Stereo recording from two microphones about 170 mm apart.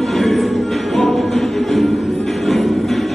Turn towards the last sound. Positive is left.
turn(degrees=0)  # may be behind; listen again after turning